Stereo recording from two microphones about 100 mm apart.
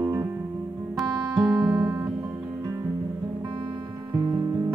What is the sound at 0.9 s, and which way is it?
Music, 5° right (ahead or behind).